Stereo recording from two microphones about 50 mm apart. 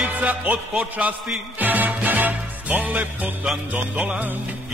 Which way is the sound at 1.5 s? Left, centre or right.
Right.